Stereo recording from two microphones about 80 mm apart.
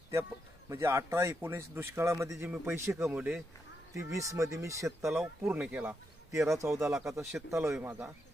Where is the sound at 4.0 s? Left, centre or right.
Right.